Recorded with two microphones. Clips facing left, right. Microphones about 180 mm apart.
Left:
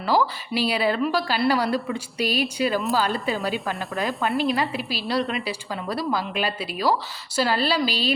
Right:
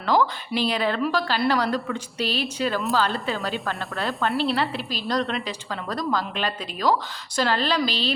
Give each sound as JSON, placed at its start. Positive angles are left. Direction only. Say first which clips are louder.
{"t": 0.0, "sound": "speech", "louder": "even", "side_deg": 10}